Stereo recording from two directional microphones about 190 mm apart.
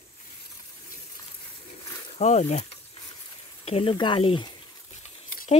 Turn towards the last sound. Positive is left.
turn(degrees=35)  # may be behind; listen again after turning